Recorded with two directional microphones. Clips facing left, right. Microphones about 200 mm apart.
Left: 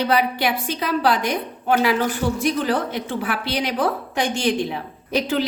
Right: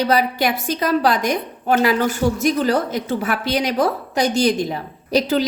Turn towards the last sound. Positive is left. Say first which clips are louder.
# right 4 dB
turn(degrees=-40)  # may be behind; listen again after turning